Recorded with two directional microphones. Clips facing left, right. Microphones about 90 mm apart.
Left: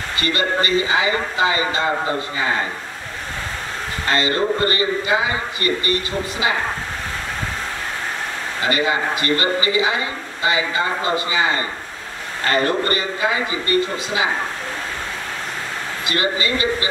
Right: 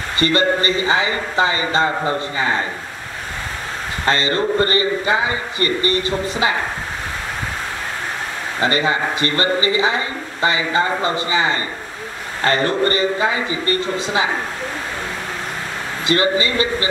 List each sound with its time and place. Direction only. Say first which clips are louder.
0.2 s a man's voice: right 4 dB; 35° right (ahead or behind)
4.0 s a man's voice: right 1 dB; 35° right (ahead or behind)
8.5 s a man's voice: right 2 dB; 35° right (ahead or behind)
12.4 s a man's voice: right 2 dB; 35° right (ahead or behind)
16.1 s a man's voice: right 4 dB; 30° right (ahead or behind)